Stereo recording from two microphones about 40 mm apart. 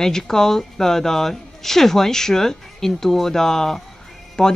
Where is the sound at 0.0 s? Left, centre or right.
Centre.